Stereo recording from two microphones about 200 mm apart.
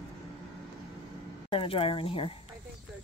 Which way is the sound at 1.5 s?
25° left (ahead or behind).